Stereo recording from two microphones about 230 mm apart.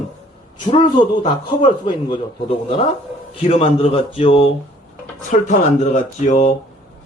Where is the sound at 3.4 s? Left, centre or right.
Left.